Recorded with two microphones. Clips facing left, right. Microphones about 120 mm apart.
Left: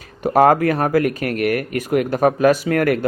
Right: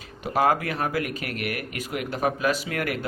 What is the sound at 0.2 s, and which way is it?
Speech, 50° left (ahead or behind).